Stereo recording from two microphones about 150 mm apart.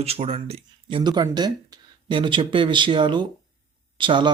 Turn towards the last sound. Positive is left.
turn(degrees=-30)  # may be behind; listen again after turning